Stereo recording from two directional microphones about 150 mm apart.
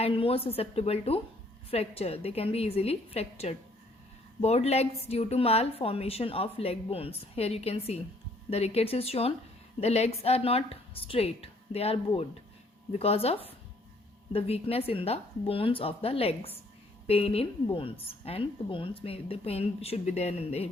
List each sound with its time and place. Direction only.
0.0 s a woman's voice: 40° left (ahead or behind)